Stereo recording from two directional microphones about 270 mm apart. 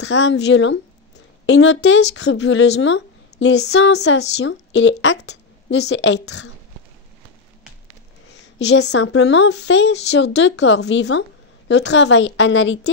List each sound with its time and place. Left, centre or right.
0.0 s a woman's voice: left
8.5 s speech: left